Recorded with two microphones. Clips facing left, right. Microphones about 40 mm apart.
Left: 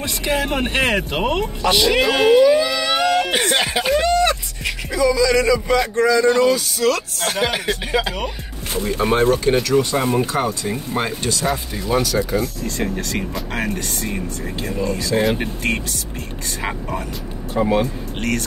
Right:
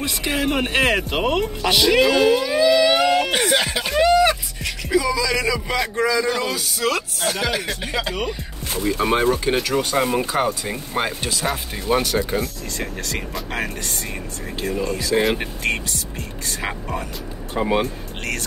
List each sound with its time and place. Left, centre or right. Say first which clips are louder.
0.0 s speech: left 1 dB; centre
2.1 s a sound: left 4 dB; centre
3.6 s speech: left 4 dB; centre
3.9 s a sound: right 2 dB; centre
4.9 s speech: left 4 dB; centre
7.2 s speech: left 2 dB; centre
9.0 s speech: left 3 dB; centre
11.9 s speech: even; right
12.6 s speech: left 5 dB; centre
17.6 s speech: left 2 dB; centre